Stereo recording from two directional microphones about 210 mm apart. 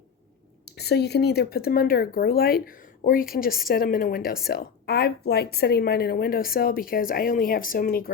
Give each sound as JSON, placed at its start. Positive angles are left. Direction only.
{"t": 0.6, "sound": "speech", "side_deg": 50}